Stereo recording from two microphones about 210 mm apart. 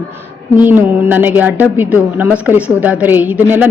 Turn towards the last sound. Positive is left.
turn(degrees=-10)  # may be behind; listen again after turning